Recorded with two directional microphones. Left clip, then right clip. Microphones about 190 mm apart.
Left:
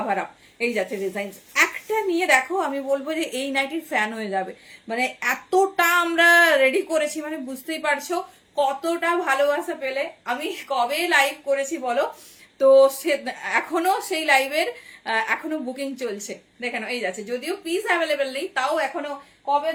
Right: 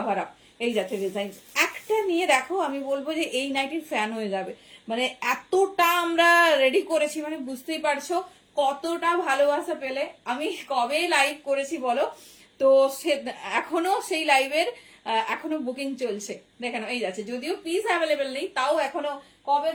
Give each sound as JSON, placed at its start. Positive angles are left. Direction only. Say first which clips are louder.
{"t": 0.1, "sound": "speech", "louder": "left 2 dB", "side_deg": 15}